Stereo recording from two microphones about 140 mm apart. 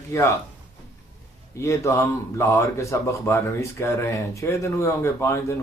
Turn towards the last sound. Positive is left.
turn(degrees=20)  # may be behind; listen again after turning